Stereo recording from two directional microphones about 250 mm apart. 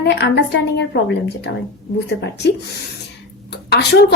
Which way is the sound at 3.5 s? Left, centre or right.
Left.